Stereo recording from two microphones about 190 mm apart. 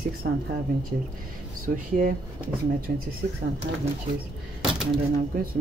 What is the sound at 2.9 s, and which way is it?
Speech, 50° right (ahead or behind).